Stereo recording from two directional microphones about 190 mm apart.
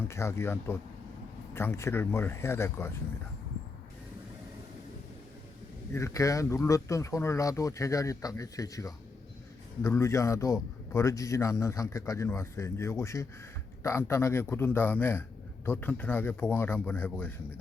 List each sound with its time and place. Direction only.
0.1 s a man's voice: 15° left (ahead or behind)
5.9 s a man's voice: 15° left (ahead or behind)